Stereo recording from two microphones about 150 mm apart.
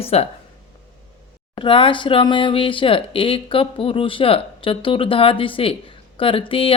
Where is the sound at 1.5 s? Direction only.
35° left (ahead or behind).